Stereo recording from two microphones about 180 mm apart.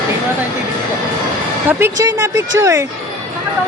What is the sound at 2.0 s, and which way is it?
Speech, 15° right (ahead or behind).